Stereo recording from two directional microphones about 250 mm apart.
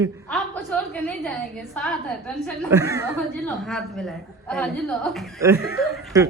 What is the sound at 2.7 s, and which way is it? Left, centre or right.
Speech, centre.